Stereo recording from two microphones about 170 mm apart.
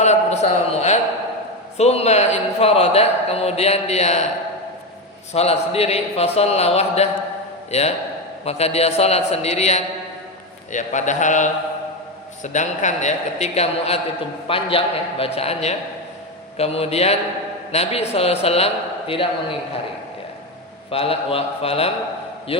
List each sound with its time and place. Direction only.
0.0 s a sound: 40° left (ahead or behind)
1.8 s a man's voice: 40° left (ahead or behind)
5.3 s a man's voice: 40° left (ahead or behind)
20.9 s a man's voice: 35° left (ahead or behind)